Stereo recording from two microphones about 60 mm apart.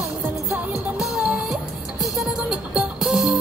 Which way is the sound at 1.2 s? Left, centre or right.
Centre.